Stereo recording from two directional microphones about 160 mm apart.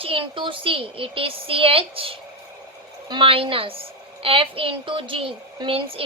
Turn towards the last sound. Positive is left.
turn(degrees=-35)  # may be behind; listen again after turning